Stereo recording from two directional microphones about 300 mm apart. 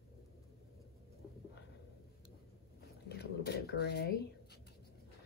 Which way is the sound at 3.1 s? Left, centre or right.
Left.